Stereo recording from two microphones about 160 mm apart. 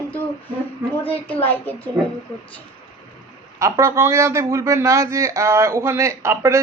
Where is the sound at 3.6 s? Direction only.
20° right (ahead or behind).